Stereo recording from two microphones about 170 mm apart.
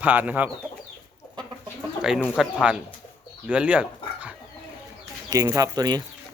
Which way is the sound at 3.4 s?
5° right (ahead or behind).